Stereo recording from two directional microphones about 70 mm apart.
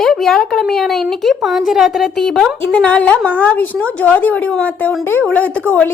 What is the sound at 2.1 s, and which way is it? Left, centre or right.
Speech, centre.